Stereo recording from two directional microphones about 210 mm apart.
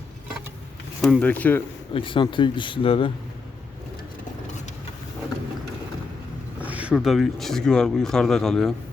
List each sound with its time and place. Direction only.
1.0 s speech: 5° left (ahead or behind)
1.9 s speech: 25° left (ahead or behind)
6.7 s speech: 5° right (ahead or behind)